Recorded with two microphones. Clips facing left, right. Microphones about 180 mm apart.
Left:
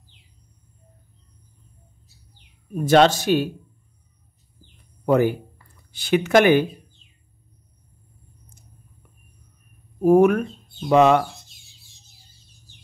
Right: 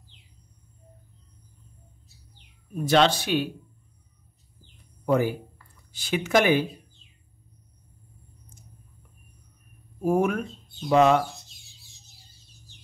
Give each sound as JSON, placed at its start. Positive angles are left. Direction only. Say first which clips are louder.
{"t": 2.7, "sound": "speech", "louder": "left 5 dB", "side_deg": 50}
{"t": 5.0, "sound": "speech", "louder": "left 5 dB", "side_deg": 60}
{"t": 10.0, "sound": "speech", "louder": "left 8 dB", "side_deg": 60}